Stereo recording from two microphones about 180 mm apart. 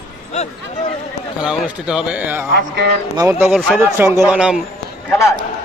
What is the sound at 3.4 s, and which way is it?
Speech, centre (ahead or behind).